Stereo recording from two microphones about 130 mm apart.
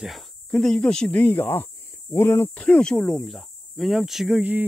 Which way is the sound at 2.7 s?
5° left (ahead or behind).